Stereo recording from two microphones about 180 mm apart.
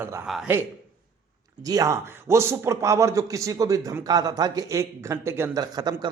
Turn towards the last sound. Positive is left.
turn(degrees=-20)  # may be behind; listen again after turning